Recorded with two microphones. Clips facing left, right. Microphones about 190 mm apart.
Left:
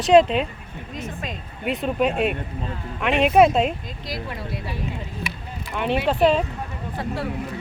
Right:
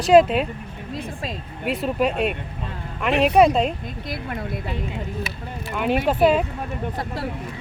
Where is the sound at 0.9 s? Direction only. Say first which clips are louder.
Right 1 dB; 30° right (ahead or behind).